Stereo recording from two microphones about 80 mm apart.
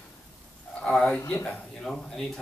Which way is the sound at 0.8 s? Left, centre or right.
Centre.